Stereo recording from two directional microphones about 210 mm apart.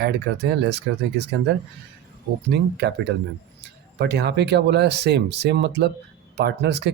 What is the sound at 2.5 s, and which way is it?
Speech, 50° right (ahead or behind).